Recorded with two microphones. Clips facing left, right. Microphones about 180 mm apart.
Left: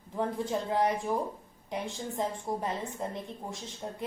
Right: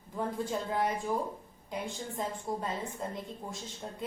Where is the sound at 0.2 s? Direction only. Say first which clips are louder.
Left 2 dB; 20° left (ahead or behind).